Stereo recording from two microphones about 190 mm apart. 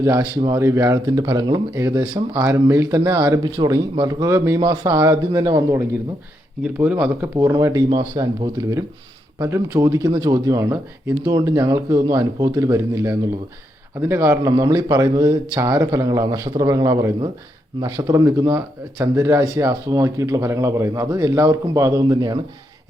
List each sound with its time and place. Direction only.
0.0 s speech: 20° right (ahead or behind)
6.6 s speech: 5° right (ahead or behind)